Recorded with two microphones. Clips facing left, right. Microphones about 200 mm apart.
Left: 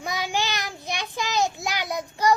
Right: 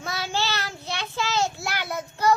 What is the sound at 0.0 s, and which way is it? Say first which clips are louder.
Child singing: left 1 dB; 15° left (ahead or behind).